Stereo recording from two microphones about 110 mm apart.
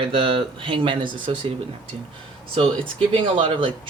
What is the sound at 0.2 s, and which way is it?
Speech, 55° right (ahead or behind).